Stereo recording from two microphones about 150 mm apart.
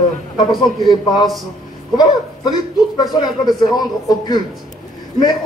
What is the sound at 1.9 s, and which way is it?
A man's voice, 30° left (ahead or behind).